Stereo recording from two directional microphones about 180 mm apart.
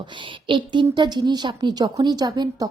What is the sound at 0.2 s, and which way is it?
Speech, 25° right (ahead or behind).